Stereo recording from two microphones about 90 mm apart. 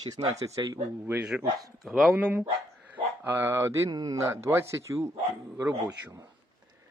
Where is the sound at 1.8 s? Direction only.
Centre (ahead or behind).